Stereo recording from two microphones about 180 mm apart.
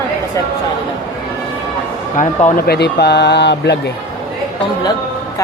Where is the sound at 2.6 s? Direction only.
65° left (ahead or behind).